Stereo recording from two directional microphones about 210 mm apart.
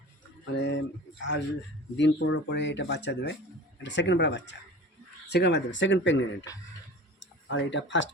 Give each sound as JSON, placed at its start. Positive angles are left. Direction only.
{"t": 0.5, "sound": "speech", "side_deg": 60}